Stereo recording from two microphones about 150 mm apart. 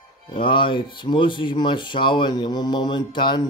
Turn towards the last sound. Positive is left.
turn(degrees=30)  # may be behind; listen again after turning